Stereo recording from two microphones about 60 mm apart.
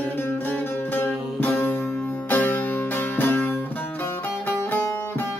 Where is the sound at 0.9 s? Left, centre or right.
Left.